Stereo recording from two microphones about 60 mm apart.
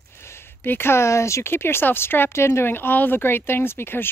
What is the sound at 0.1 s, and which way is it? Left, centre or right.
Speech, left.